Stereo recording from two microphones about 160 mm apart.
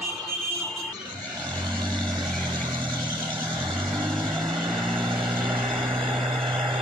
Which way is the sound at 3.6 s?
30° right (ahead or behind).